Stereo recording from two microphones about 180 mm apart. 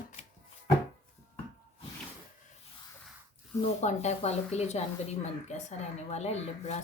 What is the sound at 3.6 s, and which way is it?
A woman's voice, 40° left (ahead or behind).